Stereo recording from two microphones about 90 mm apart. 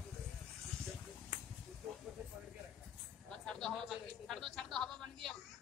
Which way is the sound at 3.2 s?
5° left (ahead or behind).